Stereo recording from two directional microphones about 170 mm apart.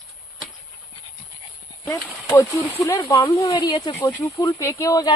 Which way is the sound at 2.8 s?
15° left (ahead or behind).